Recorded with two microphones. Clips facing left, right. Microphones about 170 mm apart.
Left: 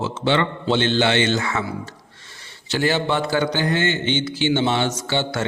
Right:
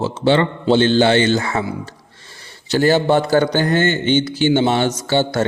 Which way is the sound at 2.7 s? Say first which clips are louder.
Right 7 dB; 40° right (ahead or behind).